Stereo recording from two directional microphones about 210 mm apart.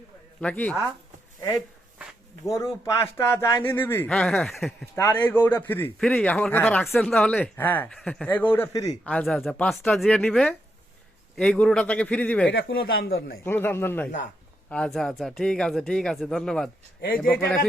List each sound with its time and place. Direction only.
0.4 s a man's voice: 5° left (ahead or behind)
2.5 s a man's voice: 15° left (ahead or behind)
4.9 s a man's voice: 10° left (ahead or behind)
12.5 s speech: 55° left (ahead or behind)
13.4 s a man's voice: 10° left (ahead or behind)
17.0 s speech: 45° left (ahead or behind)